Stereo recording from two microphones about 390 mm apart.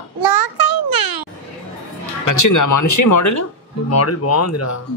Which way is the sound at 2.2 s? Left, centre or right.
Left.